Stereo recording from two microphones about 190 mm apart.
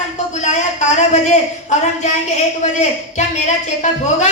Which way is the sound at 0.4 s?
40° left (ahead or behind).